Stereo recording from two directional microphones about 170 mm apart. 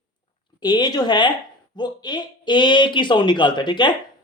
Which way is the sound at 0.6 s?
25° left (ahead or behind).